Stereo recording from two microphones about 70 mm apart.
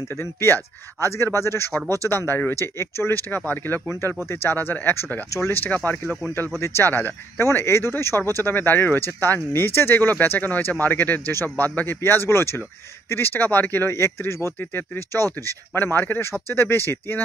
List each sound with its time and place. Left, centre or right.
0.2 s speech: left
13.9 s speech: left
14.6 s speech: left